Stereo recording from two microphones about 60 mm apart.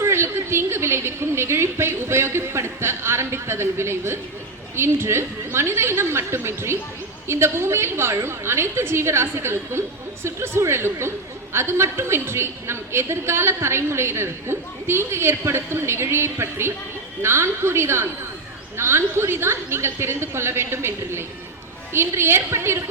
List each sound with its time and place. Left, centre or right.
0.0 s a woman's voice: right